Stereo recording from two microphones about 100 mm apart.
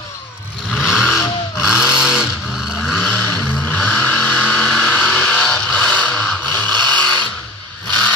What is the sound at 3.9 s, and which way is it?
Vehicle, 10° left (ahead or behind).